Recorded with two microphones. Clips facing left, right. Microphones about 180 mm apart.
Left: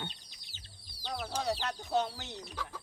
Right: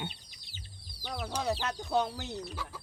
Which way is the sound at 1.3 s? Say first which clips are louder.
Right 2 dB; 55° right (ahead or behind).